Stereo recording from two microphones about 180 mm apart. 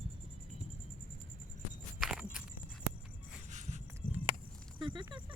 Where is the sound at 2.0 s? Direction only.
5° right (ahead or behind).